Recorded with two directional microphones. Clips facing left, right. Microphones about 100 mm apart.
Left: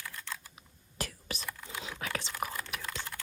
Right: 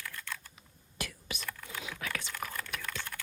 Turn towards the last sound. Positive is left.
turn(degrees=15)  # may be behind; listen again after turning